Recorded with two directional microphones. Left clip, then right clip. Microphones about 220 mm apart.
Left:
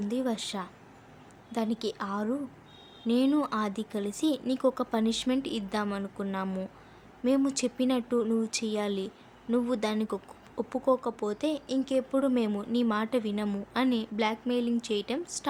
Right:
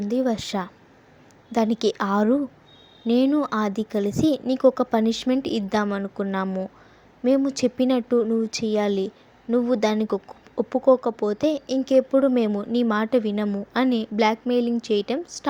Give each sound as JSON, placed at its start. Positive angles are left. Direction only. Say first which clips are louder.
{"t": 0.0, "sound": "speech", "louder": "right 8 dB", "side_deg": -20}